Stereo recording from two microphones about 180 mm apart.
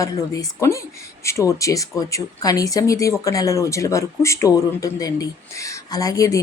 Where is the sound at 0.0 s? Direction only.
15° left (ahead or behind).